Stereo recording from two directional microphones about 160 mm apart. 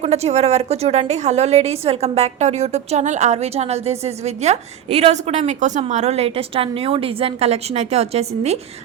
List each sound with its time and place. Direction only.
0.0 s a woman's voice: 45° right (ahead or behind)